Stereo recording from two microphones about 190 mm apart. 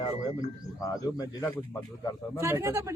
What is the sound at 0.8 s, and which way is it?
Speech, 20° left (ahead or behind).